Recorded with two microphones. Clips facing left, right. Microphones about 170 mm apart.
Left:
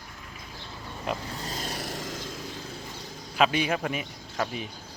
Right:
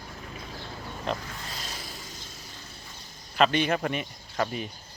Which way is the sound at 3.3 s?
5° left (ahead or behind).